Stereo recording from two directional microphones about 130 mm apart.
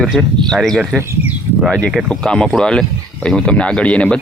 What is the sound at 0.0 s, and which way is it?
Speech, centre (ahead or behind).